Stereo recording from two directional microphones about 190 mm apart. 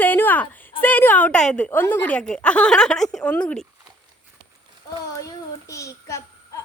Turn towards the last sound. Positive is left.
turn(degrees=15)  # may be behind; listen again after turning